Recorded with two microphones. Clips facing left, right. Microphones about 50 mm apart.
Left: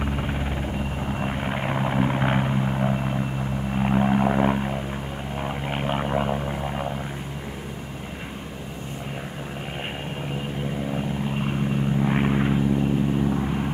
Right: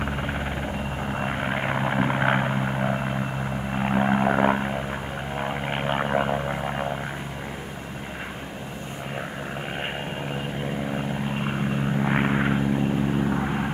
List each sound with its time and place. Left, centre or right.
0.0 s vehicle: centre
5.4 s a sound: centre
10.9 s vehicle: centre